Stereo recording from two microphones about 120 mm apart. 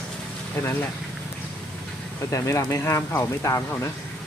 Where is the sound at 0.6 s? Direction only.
20° left (ahead or behind).